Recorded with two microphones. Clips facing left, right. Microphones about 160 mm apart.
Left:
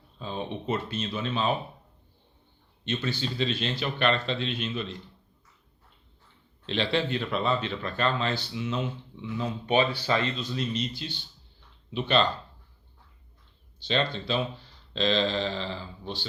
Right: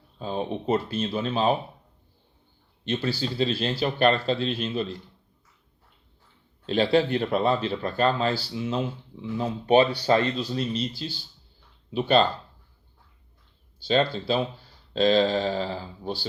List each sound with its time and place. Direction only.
0.2 s speech: 40° right (ahead or behind)
2.8 s speech: 35° right (ahead or behind)
6.7 s speech: 40° right (ahead or behind)
13.8 s speech: 40° right (ahead or behind)